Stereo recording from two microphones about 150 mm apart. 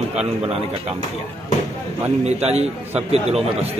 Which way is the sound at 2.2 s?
45° right (ahead or behind).